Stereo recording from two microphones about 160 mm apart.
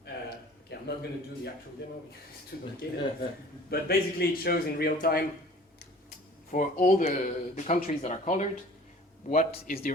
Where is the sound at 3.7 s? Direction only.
75° left (ahead or behind).